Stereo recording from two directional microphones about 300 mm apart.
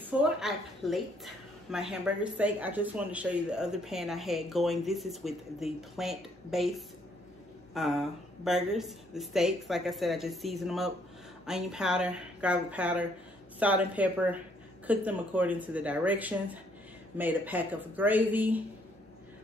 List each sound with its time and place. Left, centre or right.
0.4 s speech: centre